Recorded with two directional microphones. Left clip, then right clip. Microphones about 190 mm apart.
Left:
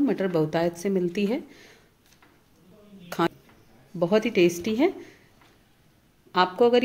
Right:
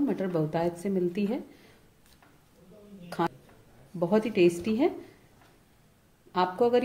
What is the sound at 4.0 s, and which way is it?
Speech, 35° left (ahead or behind).